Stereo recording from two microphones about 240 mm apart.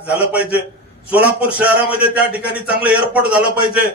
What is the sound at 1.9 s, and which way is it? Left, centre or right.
Speech, left.